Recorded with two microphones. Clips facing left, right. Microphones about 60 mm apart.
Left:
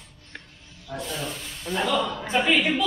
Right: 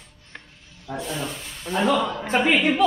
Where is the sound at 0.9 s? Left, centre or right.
Right.